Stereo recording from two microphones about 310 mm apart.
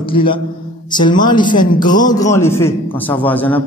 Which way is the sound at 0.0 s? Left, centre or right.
Centre.